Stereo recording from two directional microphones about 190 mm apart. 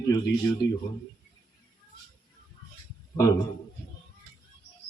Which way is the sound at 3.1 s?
15° left (ahead or behind).